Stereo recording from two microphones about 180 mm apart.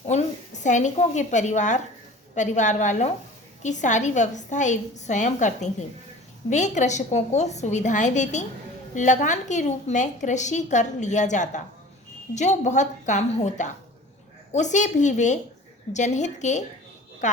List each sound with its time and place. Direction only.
0.0 s a woman's voice: 40° left (ahead or behind)